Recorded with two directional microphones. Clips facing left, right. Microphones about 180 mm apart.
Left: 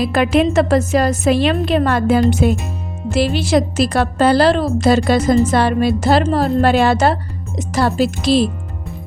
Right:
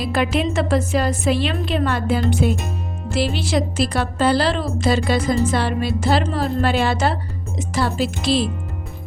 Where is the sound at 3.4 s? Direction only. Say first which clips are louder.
Left 5 dB; 45° left (ahead or behind).